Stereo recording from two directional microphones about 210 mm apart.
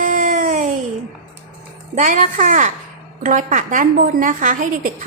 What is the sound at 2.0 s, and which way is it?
A woman's voice, 40° right (ahead or behind).